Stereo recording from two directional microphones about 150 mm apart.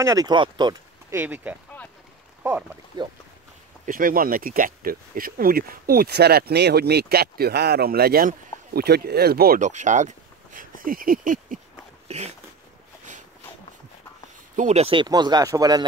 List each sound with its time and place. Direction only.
0.0 s speech: 25° right (ahead or behind)
1.1 s speech: 10° right (ahead or behind)
3.8 s speech: 70° right (ahead or behind); by 9.6 s 90° right
9.6 s speech: 55° right (ahead or behind)
14.5 s speech: 50° right (ahead or behind); by 15.8 s 25° right (ahead or behind)